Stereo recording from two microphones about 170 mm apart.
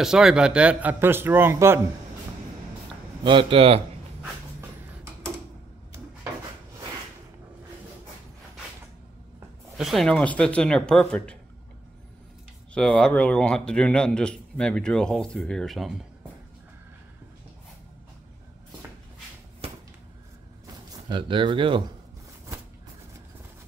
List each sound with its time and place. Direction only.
0.0 s a man's voice: 5° right (ahead or behind)
3.3 s speech: 30° right (ahead or behind)
4.2 s a sound: 15° right (ahead or behind)
9.8 s a man's voice: centre (ahead or behind)
12.7 s a man's voice: 5° left (ahead or behind)
19.6 s a sound: 35° right (ahead or behind)
20.6 s speech: 25° right (ahead or behind)